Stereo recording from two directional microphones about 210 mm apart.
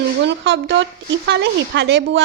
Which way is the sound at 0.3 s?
55° right (ahead or behind).